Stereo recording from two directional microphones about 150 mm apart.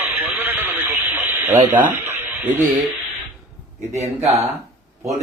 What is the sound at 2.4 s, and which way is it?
Speech, 15° right (ahead or behind).